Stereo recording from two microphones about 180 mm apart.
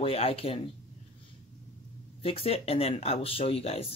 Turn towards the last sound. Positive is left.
turn(degrees=35)  # may be behind; listen again after turning